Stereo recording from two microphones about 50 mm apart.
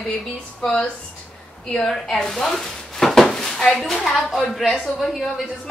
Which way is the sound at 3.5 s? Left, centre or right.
Centre.